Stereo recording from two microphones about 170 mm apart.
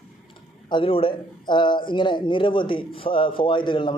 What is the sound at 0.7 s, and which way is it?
A man's voice, 30° left (ahead or behind).